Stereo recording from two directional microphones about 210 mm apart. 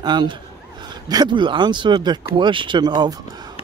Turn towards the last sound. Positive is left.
turn(degrees=-20)  # may be behind; listen again after turning